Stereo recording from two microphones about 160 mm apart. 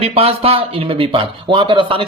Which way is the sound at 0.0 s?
40° right (ahead or behind).